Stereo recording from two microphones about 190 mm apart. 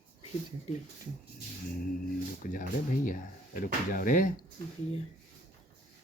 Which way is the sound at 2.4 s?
45° left (ahead or behind).